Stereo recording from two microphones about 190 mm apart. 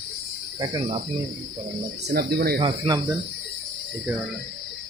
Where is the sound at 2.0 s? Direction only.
60° right (ahead or behind).